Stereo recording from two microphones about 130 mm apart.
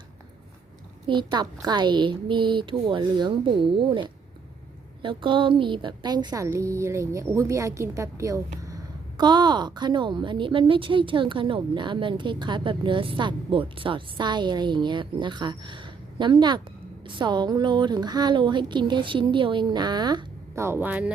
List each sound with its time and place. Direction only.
1.0 s a woman's voice: 35° right (ahead or behind)
5.0 s a woman's voice: 40° right (ahead or behind)
20.6 s speech: 15° right (ahead or behind)